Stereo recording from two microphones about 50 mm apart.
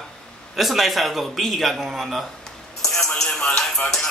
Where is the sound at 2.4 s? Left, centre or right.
Centre.